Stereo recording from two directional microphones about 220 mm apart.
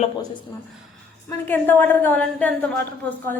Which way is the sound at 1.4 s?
10° left (ahead or behind).